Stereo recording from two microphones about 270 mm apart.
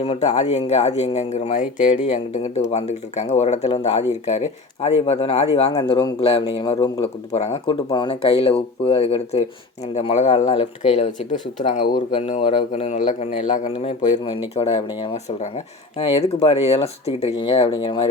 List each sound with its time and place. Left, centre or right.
0.0 s speech: left